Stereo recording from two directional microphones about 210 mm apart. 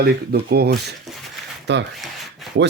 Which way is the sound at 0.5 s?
50° right (ahead or behind).